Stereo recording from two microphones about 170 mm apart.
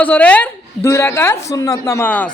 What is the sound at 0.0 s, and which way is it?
Speech, 10° left (ahead or behind).